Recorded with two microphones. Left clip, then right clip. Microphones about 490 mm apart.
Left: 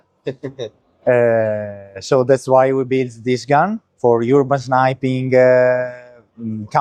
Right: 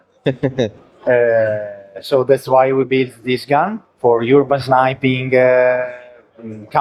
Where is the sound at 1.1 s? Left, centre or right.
Left.